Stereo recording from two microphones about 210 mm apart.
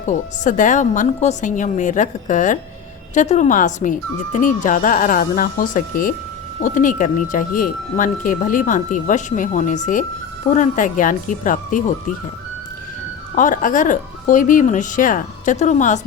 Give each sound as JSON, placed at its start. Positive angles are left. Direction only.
{"t": 0.0, "sound": "speech", "side_deg": 35}
{"t": 13.3, "sound": "speech", "side_deg": 40}